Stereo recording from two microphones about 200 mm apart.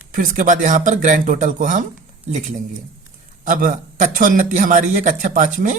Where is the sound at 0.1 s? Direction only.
40° right (ahead or behind).